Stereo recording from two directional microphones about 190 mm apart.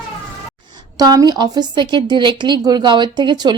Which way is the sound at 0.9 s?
20° right (ahead or behind).